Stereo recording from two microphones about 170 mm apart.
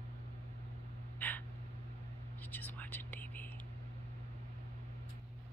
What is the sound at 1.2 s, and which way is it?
Gasp, 10° left (ahead or behind).